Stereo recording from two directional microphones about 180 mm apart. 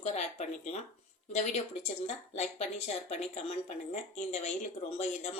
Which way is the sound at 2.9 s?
35° left (ahead or behind).